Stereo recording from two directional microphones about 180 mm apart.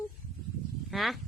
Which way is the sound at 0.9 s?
Centre (ahead or behind).